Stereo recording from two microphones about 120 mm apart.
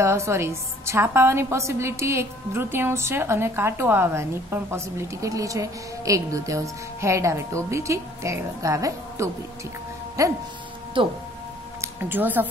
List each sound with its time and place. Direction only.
0.0 s a woman's voice: 25° right (ahead or behind)
11.0 s speech: 45° right (ahead or behind)
11.8 s speech: 15° right (ahead or behind)